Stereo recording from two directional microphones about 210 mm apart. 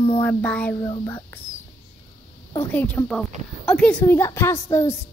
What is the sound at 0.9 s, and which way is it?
Speech, 20° left (ahead or behind).